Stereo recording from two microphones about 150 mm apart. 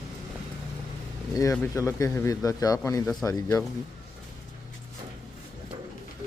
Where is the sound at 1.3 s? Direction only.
20° left (ahead or behind).